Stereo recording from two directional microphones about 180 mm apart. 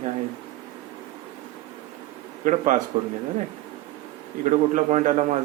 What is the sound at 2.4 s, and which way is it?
Speech, 45° right (ahead or behind).